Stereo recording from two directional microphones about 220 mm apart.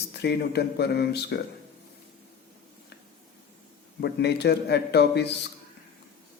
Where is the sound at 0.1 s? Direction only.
50° left (ahead or behind).